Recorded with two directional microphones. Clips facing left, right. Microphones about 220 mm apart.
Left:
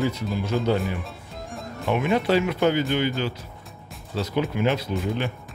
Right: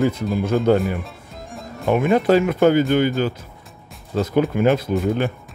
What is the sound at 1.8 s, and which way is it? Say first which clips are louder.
Speech: right 6 dB; 45° right (ahead or behind).